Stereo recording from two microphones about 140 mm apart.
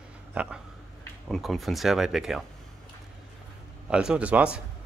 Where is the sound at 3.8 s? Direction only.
5° right (ahead or behind).